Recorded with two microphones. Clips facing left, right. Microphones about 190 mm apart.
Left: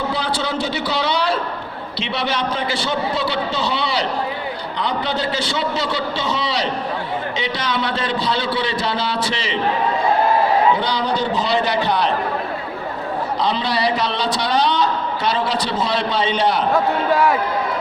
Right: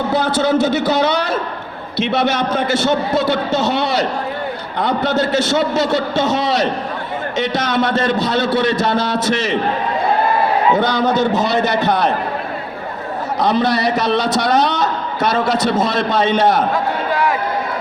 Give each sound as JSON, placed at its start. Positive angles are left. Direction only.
{"t": 0.1, "sound": "a man's voice", "side_deg": -45}
{"t": 10.8, "sound": "a man's voice", "side_deg": -45}
{"t": 13.4, "sound": "a man's voice", "side_deg": -45}